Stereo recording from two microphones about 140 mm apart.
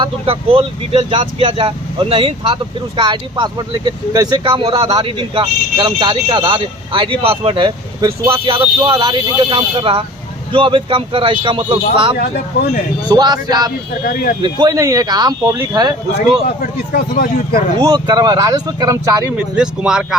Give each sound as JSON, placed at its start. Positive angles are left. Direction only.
{"t": 0.0, "sound": "speech", "side_deg": -40}
{"t": 8.8, "sound": "speech", "side_deg": -30}
{"t": 14.0, "sound": "speech", "side_deg": 90}
{"t": 14.4, "sound": "speech", "side_deg": -30}
{"t": 16.6, "sound": "speech", "side_deg": 90}
{"t": 17.7, "sound": "speech", "side_deg": -30}
{"t": 19.4, "sound": "speech", "side_deg": -5}